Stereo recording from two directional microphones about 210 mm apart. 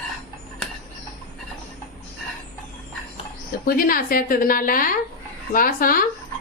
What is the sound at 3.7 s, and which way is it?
A woman's voice, 45° left (ahead or behind).